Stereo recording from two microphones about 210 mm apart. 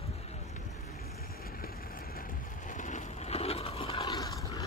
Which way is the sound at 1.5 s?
45° left (ahead or behind).